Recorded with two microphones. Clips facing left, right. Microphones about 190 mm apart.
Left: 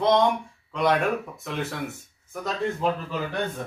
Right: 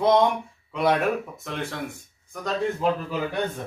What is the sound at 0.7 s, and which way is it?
A man's voice, 5° right (ahead or behind).